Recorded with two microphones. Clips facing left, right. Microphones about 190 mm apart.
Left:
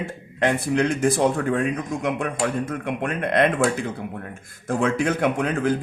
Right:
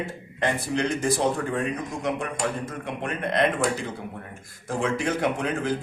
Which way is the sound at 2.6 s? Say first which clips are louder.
Left 5 dB; 55° left (ahead or behind).